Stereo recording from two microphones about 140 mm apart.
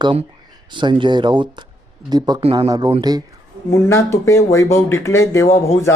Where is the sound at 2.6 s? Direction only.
30° right (ahead or behind).